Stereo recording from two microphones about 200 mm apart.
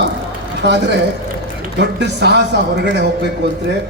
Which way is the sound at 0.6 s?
60° right (ahead or behind).